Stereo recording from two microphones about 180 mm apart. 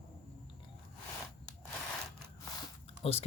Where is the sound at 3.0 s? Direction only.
35° left (ahead or behind).